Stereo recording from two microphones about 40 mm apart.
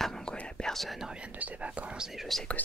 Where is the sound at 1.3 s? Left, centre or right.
Right.